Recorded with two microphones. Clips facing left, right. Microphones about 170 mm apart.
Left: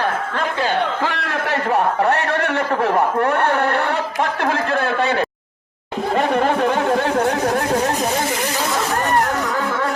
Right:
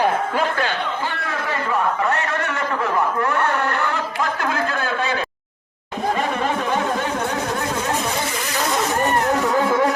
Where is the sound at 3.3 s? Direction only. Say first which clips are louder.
Left 3 dB; 60° left (ahead or behind).